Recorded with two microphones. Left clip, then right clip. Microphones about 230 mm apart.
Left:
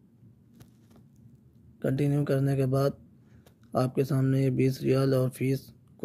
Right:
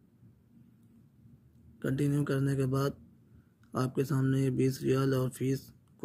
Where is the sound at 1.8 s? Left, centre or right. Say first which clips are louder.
Left 4 dB; centre.